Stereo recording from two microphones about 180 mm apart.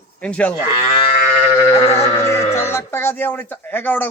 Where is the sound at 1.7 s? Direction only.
15° left (ahead or behind).